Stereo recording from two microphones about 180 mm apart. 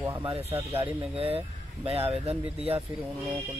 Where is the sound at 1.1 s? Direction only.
30° right (ahead or behind).